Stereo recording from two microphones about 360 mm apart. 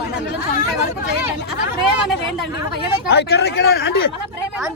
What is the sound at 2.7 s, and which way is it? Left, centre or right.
Speech, left.